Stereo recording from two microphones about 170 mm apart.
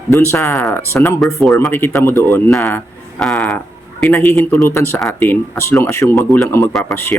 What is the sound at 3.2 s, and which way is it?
A man's voice, centre (ahead or behind).